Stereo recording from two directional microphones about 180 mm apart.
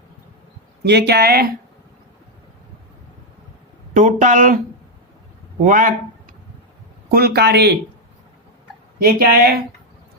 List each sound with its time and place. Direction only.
0.9 s speech: 65° right (ahead or behind)
3.9 s speech: 45° right (ahead or behind)
5.6 s speech: 45° right (ahead or behind)
7.1 s speech: 60° right (ahead or behind)
9.0 s speech: 55° right (ahead or behind)